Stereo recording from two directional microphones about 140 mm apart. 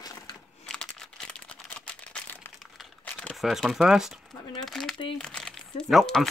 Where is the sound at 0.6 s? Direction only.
5° left (ahead or behind).